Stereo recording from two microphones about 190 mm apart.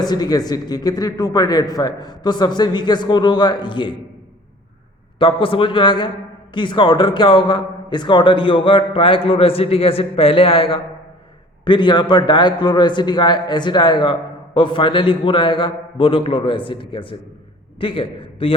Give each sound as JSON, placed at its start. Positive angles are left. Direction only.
{"t": 0.0, "sound": "a man's voice", "side_deg": 20}
{"t": 5.2, "sound": "a man's voice", "side_deg": 25}